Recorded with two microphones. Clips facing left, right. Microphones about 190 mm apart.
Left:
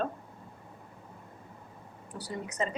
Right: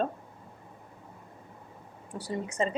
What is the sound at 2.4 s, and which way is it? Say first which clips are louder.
Speech: right 3 dB; 30° right (ahead or behind).